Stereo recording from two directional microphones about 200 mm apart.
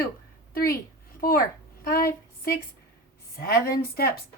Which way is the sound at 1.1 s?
45° left (ahead or behind).